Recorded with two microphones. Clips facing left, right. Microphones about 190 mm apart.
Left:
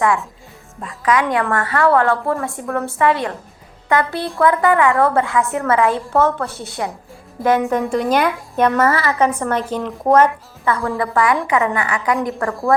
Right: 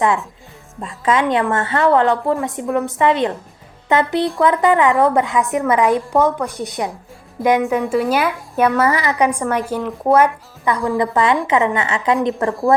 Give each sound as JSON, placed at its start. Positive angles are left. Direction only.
{"t": 0.0, "sound": "a woman's voice", "side_deg": -20}
{"t": 7.6, "sound": "a woman's voice", "side_deg": -5}